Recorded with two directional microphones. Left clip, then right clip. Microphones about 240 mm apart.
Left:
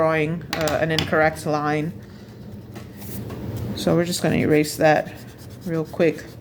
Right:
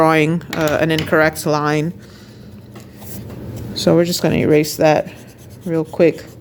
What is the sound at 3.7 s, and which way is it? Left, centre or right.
Speech, right.